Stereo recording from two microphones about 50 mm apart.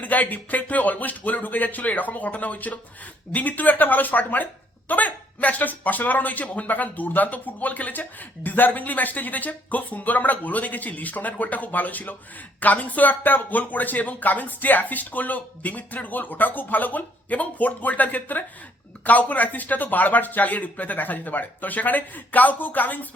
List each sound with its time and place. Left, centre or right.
0.0 s speech: left